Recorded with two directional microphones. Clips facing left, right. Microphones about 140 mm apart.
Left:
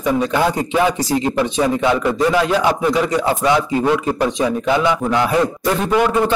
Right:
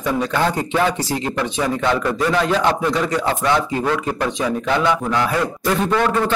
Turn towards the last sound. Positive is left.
turn(degrees=15)  # may be behind; listen again after turning